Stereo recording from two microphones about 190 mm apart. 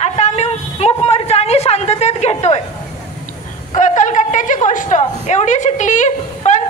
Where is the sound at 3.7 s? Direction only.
40° left (ahead or behind).